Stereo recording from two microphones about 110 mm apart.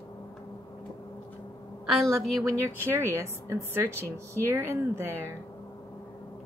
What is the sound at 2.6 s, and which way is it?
Speech, 20° right (ahead or behind).